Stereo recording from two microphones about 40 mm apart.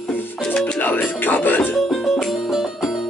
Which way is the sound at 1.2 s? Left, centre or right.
Left.